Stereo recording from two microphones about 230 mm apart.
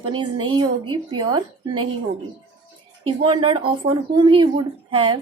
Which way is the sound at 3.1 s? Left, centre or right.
Right.